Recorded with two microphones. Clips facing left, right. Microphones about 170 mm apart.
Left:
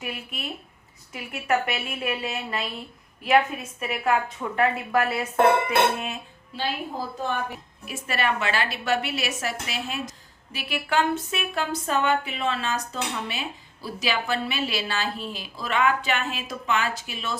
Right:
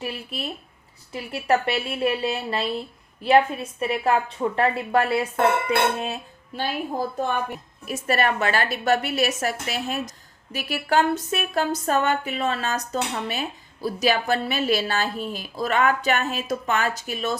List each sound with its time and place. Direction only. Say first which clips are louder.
0.0 s a woman's voice: right 3 dB; 35° right (ahead or behind)
6.5 s a woman's voice: right 2 dB; 45° right (ahead or behind)
7.9 s a woman's voice: right 4 dB; 45° right (ahead or behind)